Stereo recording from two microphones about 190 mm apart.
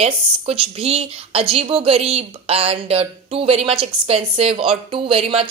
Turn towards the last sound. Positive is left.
turn(degrees=-30)  # may be behind; listen again after turning